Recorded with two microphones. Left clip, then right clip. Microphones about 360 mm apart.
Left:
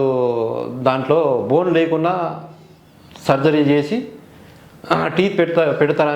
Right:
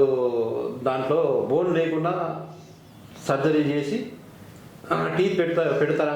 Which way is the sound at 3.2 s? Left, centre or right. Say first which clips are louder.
Left 7 dB; left.